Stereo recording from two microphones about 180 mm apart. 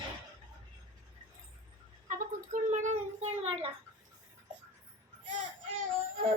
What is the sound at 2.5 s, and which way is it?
Child singing, 45° right (ahead or behind).